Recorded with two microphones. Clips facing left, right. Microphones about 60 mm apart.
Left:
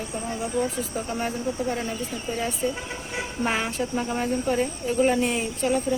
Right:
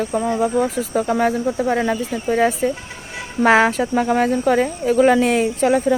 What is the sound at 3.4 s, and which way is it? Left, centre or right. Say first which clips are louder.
A woman's voice: right 13 dB; right.